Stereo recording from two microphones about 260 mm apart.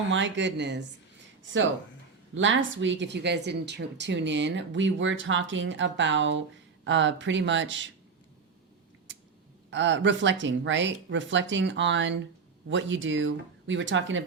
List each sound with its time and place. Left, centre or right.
0.1 s speech: right
2.3 s speech: right
9.6 s speech: right